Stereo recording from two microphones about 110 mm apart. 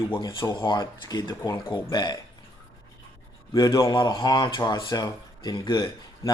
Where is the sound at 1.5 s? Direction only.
25° left (ahead or behind).